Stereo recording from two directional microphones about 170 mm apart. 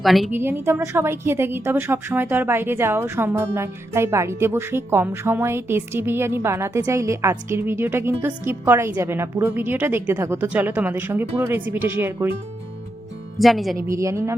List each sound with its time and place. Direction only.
0.0 s speech: centre (ahead or behind)
0.3 s a woman's voice: 15° right (ahead or behind)
13.4 s speech: centre (ahead or behind)
13.9 s a woman's voice: 20° right (ahead or behind)